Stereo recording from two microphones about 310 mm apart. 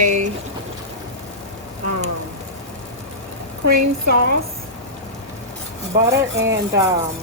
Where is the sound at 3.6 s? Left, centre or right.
Right.